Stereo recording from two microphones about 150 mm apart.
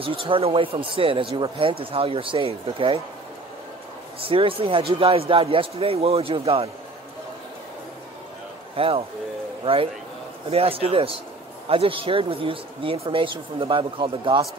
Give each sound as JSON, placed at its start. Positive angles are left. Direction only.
{"t": 0.0, "sound": "speech", "side_deg": -35}
{"t": 4.2, "sound": "speech", "side_deg": -35}
{"t": 8.7, "sound": "a man's voice", "side_deg": -40}